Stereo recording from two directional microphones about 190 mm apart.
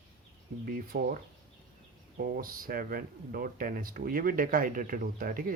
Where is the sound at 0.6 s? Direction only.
50° right (ahead or behind).